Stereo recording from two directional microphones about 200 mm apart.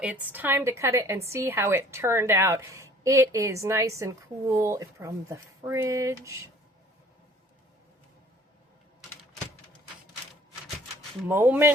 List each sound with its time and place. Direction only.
0.0 s a woman's voice: 10° right (ahead or behind)
11.3 s a woman's voice: 10° right (ahead or behind)